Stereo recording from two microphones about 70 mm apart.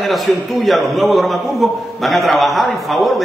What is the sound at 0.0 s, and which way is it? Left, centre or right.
A man's voice, centre.